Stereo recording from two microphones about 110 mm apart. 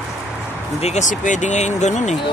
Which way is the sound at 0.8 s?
85° left.